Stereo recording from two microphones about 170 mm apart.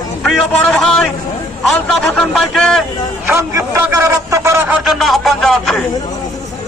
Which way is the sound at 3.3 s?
15° right (ahead or behind).